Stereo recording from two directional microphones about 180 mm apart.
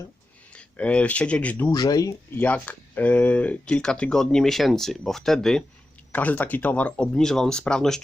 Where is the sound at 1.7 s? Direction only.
20° left (ahead or behind).